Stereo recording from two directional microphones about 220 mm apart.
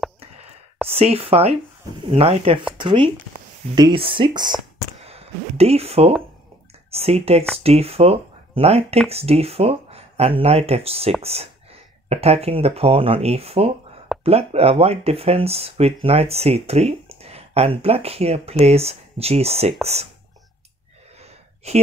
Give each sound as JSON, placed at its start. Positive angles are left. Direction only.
{"t": 0.8, "sound": "speech", "side_deg": -25}
{"t": 21.2, "sound": "gasp", "side_deg": -30}